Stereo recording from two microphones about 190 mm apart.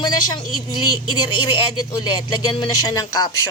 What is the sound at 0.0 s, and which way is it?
Speech, 20° left (ahead or behind).